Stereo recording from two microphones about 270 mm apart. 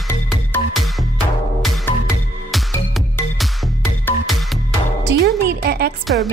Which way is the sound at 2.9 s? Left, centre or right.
Centre.